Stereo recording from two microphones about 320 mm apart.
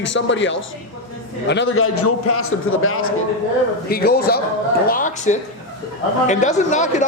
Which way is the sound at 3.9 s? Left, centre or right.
Left.